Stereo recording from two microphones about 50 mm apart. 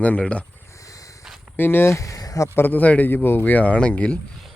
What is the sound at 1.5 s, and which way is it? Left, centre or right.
Speech, left.